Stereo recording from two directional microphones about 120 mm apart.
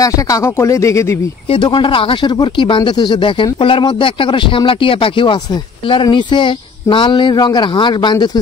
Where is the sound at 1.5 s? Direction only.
45° left (ahead or behind).